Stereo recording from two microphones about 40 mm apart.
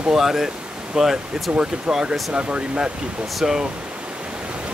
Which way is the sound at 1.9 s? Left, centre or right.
Centre.